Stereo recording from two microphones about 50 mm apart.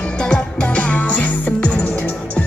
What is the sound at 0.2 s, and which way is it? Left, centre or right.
Music, centre.